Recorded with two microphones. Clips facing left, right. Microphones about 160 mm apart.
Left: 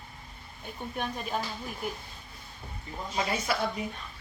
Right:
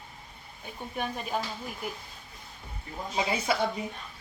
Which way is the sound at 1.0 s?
5° right (ahead or behind).